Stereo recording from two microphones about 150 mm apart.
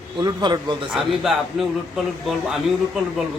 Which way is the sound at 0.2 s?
30° right (ahead or behind).